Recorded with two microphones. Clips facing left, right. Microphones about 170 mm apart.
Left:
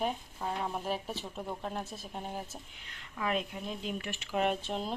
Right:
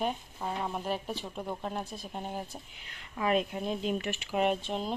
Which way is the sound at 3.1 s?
20° right (ahead or behind).